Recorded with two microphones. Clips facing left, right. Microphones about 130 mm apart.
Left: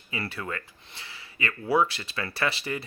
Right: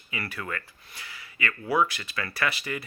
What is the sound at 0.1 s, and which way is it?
Speech, 30° left (ahead or behind).